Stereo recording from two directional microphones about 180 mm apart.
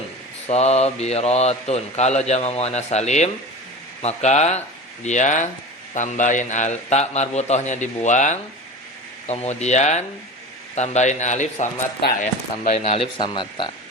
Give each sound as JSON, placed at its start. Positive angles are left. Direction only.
{"t": 0.4, "sound": "speech", "side_deg": 35}